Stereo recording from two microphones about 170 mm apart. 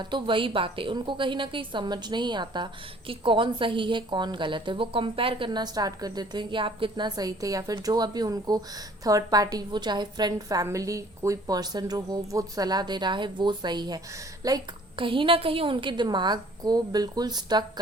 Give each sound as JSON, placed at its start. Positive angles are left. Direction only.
{"t": 0.0, "sound": "a woman's voice", "side_deg": -30}